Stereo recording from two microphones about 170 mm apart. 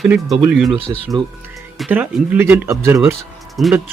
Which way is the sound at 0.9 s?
20° right (ahead or behind).